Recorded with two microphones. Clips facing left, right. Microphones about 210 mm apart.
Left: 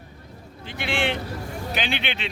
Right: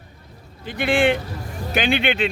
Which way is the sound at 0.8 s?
50° right (ahead or behind).